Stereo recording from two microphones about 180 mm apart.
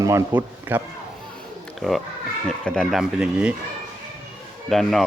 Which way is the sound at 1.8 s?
5° left (ahead or behind).